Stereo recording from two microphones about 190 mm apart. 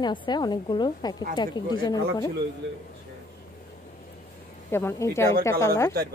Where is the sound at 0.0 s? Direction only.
25° left (ahead or behind).